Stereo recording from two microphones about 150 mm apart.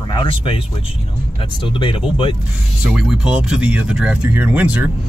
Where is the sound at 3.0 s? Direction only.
5° right (ahead or behind).